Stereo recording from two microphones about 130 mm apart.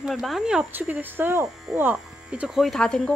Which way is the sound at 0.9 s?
15° right (ahead or behind).